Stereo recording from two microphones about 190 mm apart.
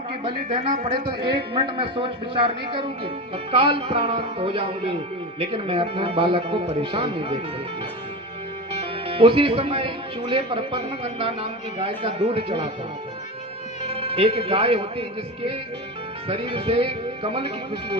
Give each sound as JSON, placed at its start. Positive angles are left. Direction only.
{"t": 0.3, "sound": "a man's voice", "side_deg": -30}
{"t": 8.8, "sound": "a man's voice", "side_deg": -30}
{"t": 13.9, "sound": "speech", "side_deg": -30}
{"t": 16.3, "sound": "a man's voice", "side_deg": -30}